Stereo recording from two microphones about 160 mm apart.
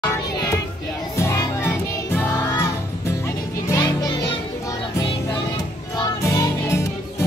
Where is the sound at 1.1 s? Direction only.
20° left (ahead or behind).